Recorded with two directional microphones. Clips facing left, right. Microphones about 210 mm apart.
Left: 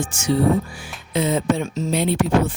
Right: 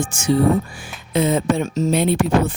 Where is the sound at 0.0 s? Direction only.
50° right (ahead or behind).